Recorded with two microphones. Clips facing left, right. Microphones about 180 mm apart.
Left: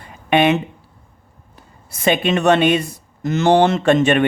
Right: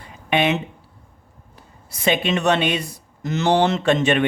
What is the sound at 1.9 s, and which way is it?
Speech, 50° left (ahead or behind).